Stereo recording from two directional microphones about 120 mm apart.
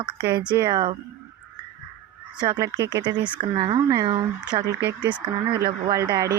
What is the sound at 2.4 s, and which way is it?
Speech, 35° right (ahead or behind).